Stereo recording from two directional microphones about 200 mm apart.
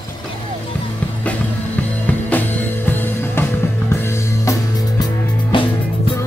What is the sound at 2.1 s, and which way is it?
Music, 10° left (ahead or behind).